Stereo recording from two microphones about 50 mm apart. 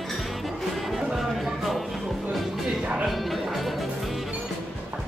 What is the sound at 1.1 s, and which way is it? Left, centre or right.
Music, centre.